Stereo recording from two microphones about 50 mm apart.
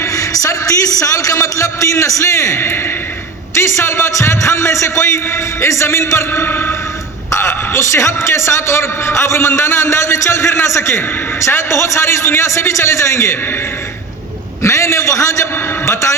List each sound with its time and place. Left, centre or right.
0.0 s a man's voice: left
3.5 s a man's voice: left
6.5 s a sound: left
7.3 s a man's voice: left
14.6 s a man's voice: left